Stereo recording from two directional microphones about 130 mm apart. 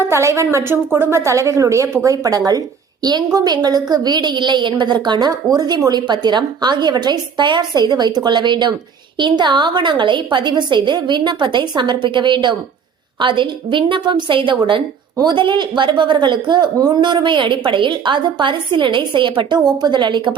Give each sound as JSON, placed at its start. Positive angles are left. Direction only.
{"t": 0.0, "sound": "a woman's voice", "side_deg": -20}